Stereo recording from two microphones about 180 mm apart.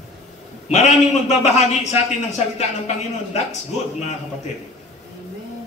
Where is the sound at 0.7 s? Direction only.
40° left (ahead or behind).